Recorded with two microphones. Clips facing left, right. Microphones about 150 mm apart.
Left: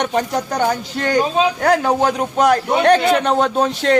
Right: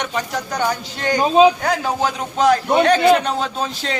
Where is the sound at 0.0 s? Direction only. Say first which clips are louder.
Left 5 dB; 50° left (ahead or behind).